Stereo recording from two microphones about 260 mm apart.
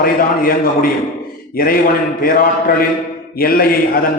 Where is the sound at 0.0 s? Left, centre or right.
Left.